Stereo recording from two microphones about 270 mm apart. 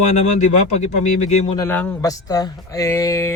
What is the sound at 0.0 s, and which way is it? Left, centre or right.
Speech, left.